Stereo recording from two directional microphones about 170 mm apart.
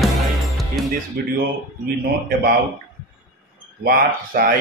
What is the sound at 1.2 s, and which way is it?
Speech, 70° right (ahead or behind).